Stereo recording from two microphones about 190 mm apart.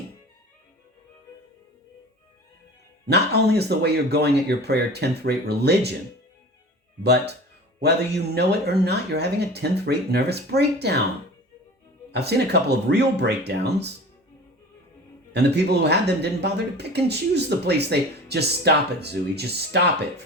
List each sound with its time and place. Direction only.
3.1 s speech: 60° right (ahead or behind)
7.0 s speech: 60° right (ahead or behind)
12.1 s speech: 60° right (ahead or behind)
15.3 s speech: 60° right (ahead or behind)